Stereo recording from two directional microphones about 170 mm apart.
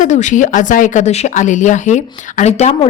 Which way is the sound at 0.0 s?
45° left (ahead or behind).